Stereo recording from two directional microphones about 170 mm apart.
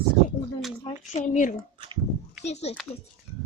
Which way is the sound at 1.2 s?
45° left (ahead or behind).